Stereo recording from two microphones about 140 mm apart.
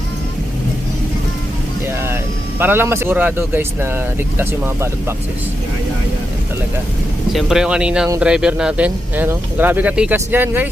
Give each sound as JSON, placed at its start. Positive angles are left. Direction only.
{"t": 2.6, "sound": "speech", "side_deg": -15}
{"t": 7.3, "sound": "speech", "side_deg": -5}